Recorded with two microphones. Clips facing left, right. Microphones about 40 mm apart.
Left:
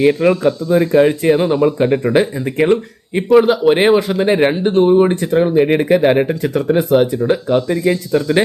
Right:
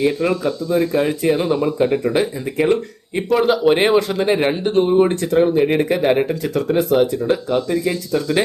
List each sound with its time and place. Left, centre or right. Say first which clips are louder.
0.0 s speech: left 6 dB; left
3.2 s speech: left 4 dB; centre